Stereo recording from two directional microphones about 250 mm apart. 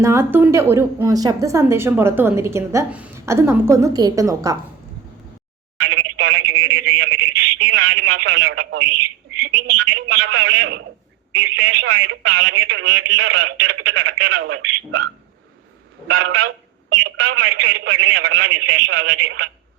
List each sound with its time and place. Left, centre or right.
0.0 s a woman's voice: centre
5.8 s telephone: right
7.6 s speech: right